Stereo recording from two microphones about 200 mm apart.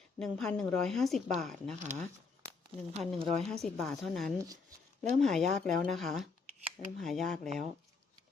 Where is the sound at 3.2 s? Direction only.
30° right (ahead or behind).